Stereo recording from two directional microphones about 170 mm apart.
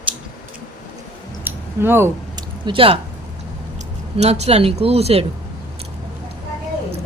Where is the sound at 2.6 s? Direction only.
30° right (ahead or behind).